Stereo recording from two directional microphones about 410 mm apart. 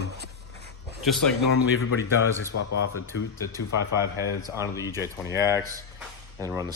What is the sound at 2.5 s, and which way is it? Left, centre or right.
Speech, left.